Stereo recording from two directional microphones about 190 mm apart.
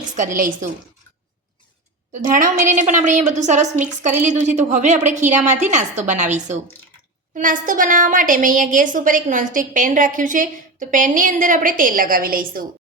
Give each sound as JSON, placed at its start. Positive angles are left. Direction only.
{"t": 0.2, "sound": "a woman's voice", "side_deg": -45}
{"t": 2.6, "sound": "a woman's voice", "side_deg": -40}